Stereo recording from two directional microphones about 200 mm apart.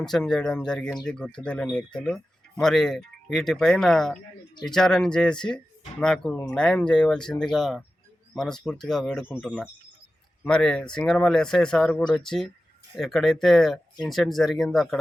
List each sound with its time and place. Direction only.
0.0 s speech: 5° left (ahead or behind)